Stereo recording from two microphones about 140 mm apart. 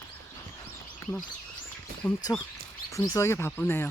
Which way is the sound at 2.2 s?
25° left (ahead or behind).